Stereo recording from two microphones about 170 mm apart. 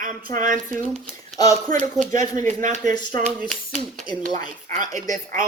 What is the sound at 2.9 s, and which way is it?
Speech, 25° left (ahead or behind).